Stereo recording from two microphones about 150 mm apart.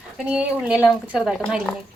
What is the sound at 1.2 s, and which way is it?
Speech, 5° left (ahead or behind).